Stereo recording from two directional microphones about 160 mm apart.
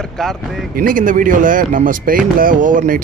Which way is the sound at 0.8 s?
60° right (ahead or behind).